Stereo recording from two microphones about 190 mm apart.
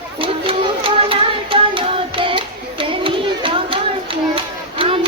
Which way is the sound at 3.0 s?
25° right (ahead or behind).